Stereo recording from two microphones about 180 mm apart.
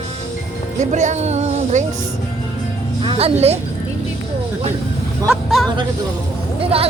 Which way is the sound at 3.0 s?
30° right (ahead or behind).